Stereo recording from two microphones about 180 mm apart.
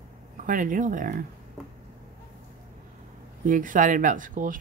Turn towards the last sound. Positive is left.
turn(degrees=-45)  # may be behind; listen again after turning